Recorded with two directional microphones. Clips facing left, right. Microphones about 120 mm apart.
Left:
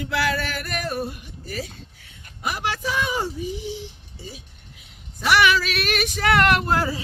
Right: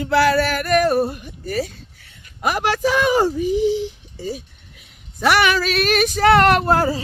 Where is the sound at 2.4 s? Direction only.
65° right (ahead or behind); by 3.5 s 85° right.